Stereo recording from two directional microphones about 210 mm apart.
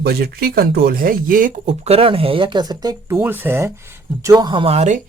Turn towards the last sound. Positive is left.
turn(degrees=-35)  # may be behind; listen again after turning